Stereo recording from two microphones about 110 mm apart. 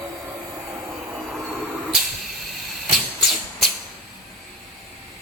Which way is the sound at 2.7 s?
Centre (ahead or behind).